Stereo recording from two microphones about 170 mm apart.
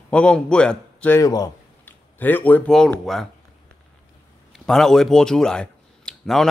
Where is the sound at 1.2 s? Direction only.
20° left (ahead or behind).